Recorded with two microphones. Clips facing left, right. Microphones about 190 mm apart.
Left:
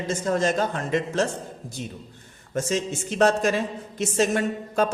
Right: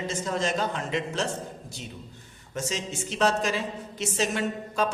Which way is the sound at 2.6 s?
50° left (ahead or behind).